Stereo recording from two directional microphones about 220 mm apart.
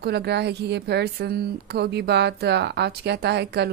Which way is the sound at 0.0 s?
50° right (ahead or behind).